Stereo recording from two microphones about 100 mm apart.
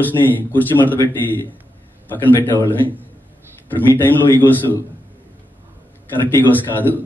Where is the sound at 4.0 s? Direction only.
20° left (ahead or behind).